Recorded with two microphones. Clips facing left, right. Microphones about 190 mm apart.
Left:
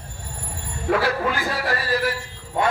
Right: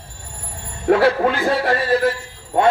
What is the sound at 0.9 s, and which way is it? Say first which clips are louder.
A man's voice: right 7 dB; 25° right (ahead or behind).